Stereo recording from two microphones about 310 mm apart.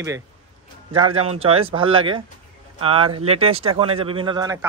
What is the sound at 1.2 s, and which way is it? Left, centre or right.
Speech, centre.